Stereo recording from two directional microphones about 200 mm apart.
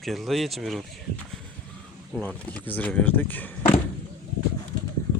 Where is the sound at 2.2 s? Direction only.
5° left (ahead or behind).